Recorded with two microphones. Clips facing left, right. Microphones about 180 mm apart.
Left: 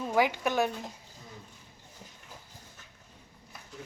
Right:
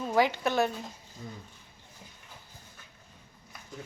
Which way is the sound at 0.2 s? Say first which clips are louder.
Right 1 dB; 10° left (ahead or behind).